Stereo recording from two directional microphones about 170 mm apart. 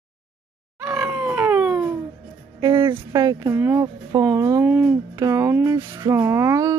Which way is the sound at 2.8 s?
20° right (ahead or behind).